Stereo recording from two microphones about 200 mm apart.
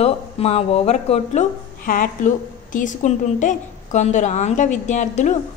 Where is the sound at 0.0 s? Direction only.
30° left (ahead or behind).